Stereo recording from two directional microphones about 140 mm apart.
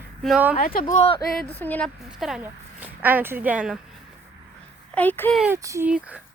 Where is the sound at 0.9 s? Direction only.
45° left (ahead or behind).